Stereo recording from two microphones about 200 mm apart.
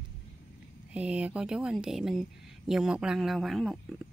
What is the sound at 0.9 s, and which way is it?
Speech, 5° right (ahead or behind).